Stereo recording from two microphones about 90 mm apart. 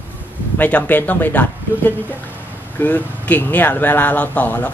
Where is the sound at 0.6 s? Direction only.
15° left (ahead or behind).